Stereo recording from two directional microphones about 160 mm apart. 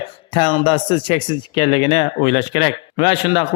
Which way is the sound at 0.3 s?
30° left (ahead or behind).